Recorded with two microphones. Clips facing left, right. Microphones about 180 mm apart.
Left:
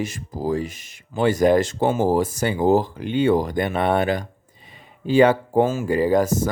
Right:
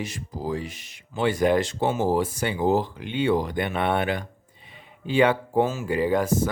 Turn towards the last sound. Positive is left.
turn(degrees=40)  # may be behind; listen again after turning